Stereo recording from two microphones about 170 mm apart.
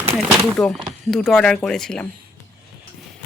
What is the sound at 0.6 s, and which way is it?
Speech, 5° left (ahead or behind).